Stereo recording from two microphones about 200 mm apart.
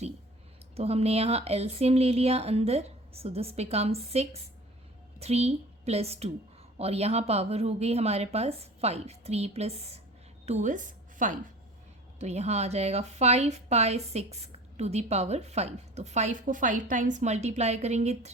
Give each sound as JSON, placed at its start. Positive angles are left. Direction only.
{"t": 0.8, "sound": "a woman's voice", "side_deg": -30}